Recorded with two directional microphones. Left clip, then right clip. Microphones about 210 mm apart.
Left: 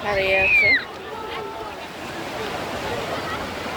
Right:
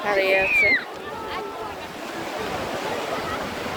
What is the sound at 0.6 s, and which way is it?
Speech, 25° left (ahead or behind).